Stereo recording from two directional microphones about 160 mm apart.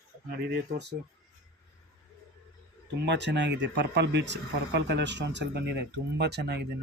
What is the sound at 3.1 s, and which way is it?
Speech, 90° right.